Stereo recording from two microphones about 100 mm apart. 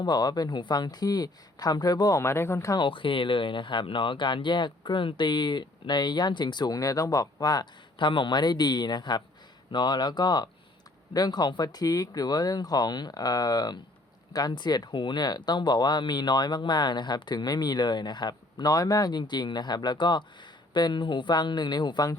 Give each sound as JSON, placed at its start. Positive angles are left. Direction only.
{"t": 0.0, "sound": "speech", "side_deg": 45}
{"t": 2.7, "sound": "speech", "side_deg": 55}